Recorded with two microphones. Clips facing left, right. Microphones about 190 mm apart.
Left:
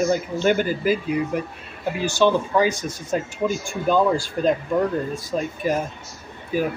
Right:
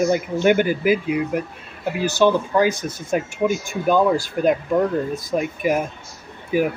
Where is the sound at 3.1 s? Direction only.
15° right (ahead or behind).